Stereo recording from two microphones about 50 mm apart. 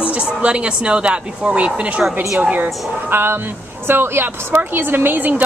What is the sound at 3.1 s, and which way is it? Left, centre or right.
A woman's voice, right.